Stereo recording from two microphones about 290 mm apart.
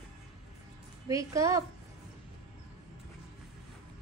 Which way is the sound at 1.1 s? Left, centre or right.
Centre.